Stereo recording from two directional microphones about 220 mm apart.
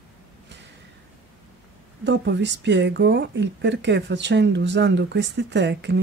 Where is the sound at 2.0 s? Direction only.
50° right (ahead or behind).